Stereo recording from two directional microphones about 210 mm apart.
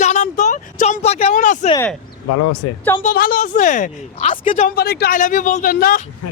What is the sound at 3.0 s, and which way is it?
Speech, 45° left (ahead or behind).